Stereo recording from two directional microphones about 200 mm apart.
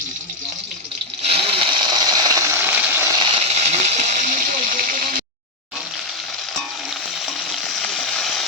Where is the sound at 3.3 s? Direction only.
35° right (ahead or behind).